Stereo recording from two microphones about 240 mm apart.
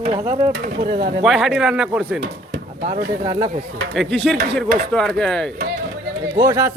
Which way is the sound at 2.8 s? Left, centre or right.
Right.